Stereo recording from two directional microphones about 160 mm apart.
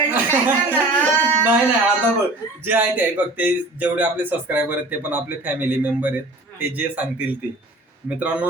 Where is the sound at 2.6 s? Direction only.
10° right (ahead or behind).